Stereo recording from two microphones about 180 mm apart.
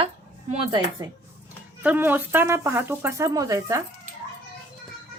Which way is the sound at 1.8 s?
10° right (ahead or behind).